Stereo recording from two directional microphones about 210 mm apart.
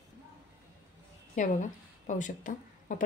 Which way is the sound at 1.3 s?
35° left (ahead or behind).